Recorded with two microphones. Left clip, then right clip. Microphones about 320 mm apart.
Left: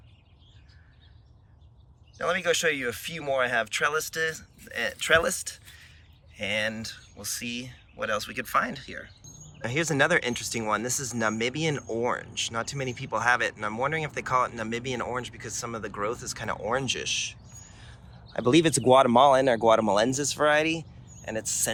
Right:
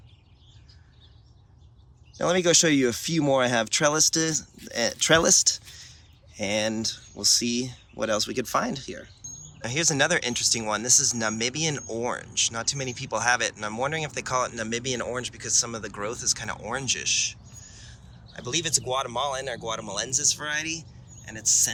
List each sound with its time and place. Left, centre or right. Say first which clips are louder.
2.1 s speech: right 4 dB; centre
18.3 s speech: left 6 dB; centre